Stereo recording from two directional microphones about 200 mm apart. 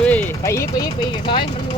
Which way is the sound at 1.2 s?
25° left (ahead or behind).